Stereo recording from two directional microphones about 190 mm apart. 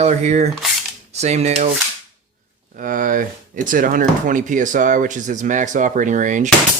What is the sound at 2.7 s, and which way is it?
Speech, 45° right (ahead or behind).